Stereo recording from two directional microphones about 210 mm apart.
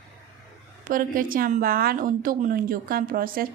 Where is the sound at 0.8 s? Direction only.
40° right (ahead or behind).